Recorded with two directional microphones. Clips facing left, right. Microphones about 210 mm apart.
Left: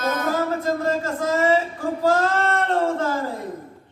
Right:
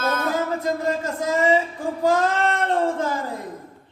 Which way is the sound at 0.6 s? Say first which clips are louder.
Left 1 dB; 15° right (ahead or behind).